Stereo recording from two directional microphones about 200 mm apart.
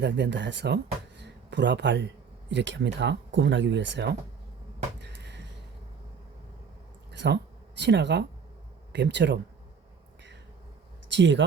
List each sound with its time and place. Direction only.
0.0 s speech: 60° right (ahead or behind)
4.9 s a sound: 60° right (ahead or behind)
7.1 s speech: 60° right (ahead or behind)
11.1 s speech: 65° right (ahead or behind)